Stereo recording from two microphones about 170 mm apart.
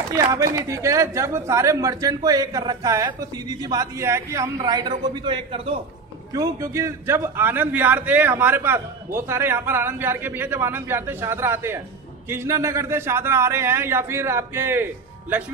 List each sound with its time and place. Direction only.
0.1 s speech: 20° right (ahead or behind)
6.3 s a man's voice: 20° right (ahead or behind)